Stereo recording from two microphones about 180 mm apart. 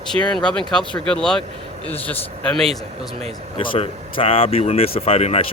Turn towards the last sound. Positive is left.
turn(degrees=35)  # may be behind; listen again after turning